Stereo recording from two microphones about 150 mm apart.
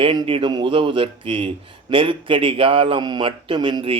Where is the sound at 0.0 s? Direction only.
30° right (ahead or behind).